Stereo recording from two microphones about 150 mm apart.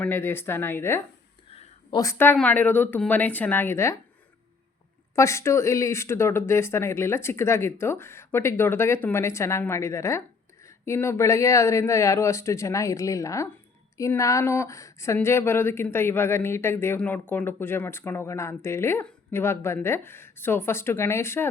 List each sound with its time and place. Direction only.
0.0 s speech: 15° left (ahead or behind)
1.5 s a sound: 40° left (ahead or behind)
2.0 s speech: 15° left (ahead or behind)
5.1 s speech: 20° left (ahead or behind)